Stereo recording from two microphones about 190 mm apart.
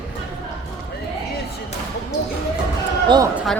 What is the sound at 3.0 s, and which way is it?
Speech, 20° right (ahead or behind).